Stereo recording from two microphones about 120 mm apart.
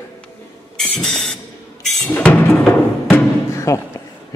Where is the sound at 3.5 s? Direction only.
25° left (ahead or behind).